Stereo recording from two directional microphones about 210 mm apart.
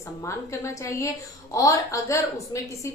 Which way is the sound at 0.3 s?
15° left (ahead or behind).